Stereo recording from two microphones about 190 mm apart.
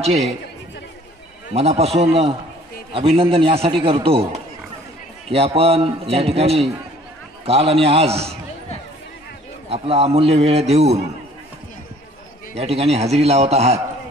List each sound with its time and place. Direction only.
1.5 s a man's voice: 35° right (ahead or behind)
5.3 s a man's voice: 30° right (ahead or behind)
9.7 s a man's voice: 30° right (ahead or behind)
12.5 s a man's voice: 30° right (ahead or behind)